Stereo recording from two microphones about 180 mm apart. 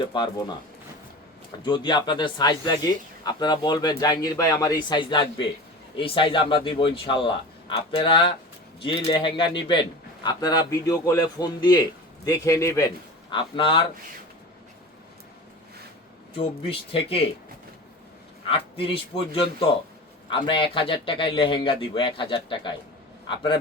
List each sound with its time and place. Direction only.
0.1 s speech: 25° left (ahead or behind)
1.6 s speech: 25° left (ahead or behind)
13.3 s speech: 25° left (ahead or behind)
16.3 s speech: 30° left (ahead or behind)
18.4 s speech: 30° left (ahead or behind)